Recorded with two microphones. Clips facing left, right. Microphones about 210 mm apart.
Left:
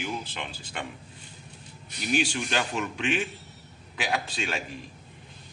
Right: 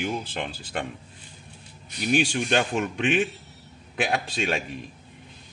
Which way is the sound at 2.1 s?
50° right (ahead or behind).